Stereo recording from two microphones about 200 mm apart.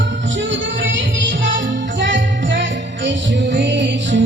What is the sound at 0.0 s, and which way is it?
Music, 65° right (ahead or behind).